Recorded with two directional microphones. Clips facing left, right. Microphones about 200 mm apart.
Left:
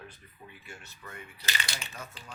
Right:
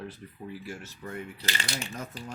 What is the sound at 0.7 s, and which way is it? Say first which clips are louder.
Speech: right 9 dB; 35° right (ahead or behind).